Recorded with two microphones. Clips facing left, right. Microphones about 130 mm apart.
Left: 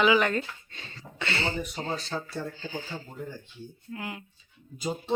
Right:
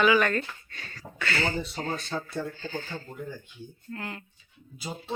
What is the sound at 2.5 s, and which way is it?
Speech, 15° left (ahead or behind).